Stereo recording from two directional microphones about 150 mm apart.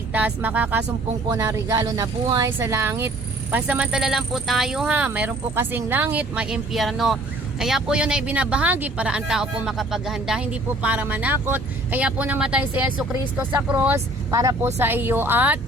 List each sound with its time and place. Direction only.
0.1 s speech: 10° right (ahead or behind)